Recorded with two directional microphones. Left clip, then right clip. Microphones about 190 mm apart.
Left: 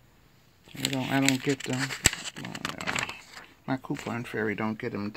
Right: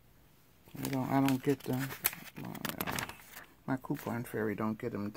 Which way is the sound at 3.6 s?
Centre (ahead or behind).